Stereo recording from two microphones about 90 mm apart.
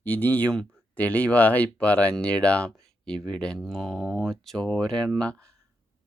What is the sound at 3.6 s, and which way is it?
Speech, centre (ahead or behind).